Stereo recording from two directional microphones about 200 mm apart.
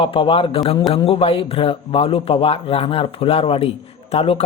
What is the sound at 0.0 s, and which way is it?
A man's voice, 25° left (ahead or behind).